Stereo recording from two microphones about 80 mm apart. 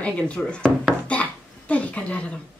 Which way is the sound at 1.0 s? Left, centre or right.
Centre.